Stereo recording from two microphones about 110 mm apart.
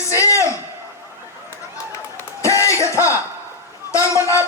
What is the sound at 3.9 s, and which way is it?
Speech, 30° left (ahead or behind).